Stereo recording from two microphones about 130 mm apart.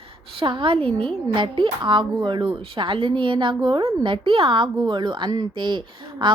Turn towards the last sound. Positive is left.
turn(degrees=-40)  # may be behind; listen again after turning